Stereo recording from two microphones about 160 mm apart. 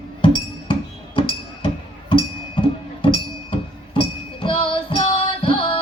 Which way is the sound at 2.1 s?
30° left (ahead or behind).